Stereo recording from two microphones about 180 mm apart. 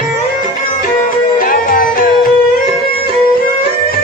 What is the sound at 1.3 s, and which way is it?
Music, 55° left (ahead or behind).